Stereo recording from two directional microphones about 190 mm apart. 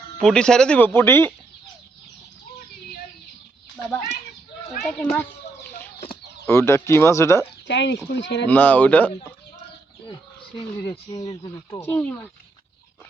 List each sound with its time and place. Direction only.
0.2 s speech: 5° left (ahead or behind)
4.8 s speech: 5° left (ahead or behind)
6.4 s speech: 15° left (ahead or behind)
7.7 s speech: 65° left (ahead or behind)
8.4 s speech: 10° left (ahead or behind)
11.3 s speech: 15° left (ahead or behind)